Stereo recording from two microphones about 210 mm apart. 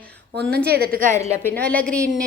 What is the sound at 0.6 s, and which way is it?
Speech, 50° right (ahead or behind).